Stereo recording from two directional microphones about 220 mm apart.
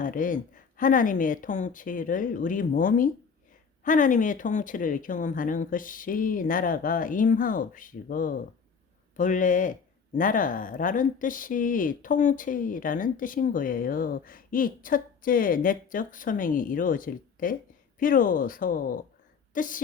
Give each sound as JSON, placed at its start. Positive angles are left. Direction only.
{"t": 0.0, "sound": "speech", "side_deg": 35}